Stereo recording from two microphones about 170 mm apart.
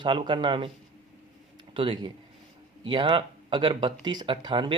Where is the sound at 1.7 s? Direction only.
30° right (ahead or behind).